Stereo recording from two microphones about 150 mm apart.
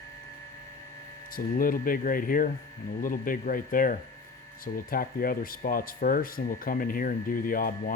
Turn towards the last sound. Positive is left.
turn(degrees=70)  # may be behind; listen again after turning